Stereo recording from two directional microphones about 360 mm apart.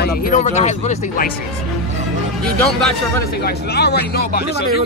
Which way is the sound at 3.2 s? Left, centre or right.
Left.